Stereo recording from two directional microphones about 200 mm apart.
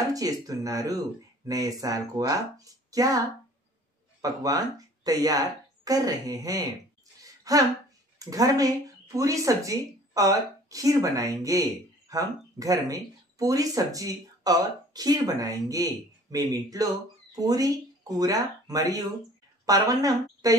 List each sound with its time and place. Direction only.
0.1 s speech: 15° right (ahead or behind)
4.2 s speech: 20° right (ahead or behind)
7.2 s a sound: 15° right (ahead or behind)
8.2 s speech: 15° right (ahead or behind)